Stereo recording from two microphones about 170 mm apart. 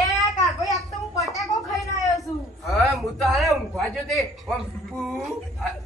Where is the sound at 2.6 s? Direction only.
Centre (ahead or behind).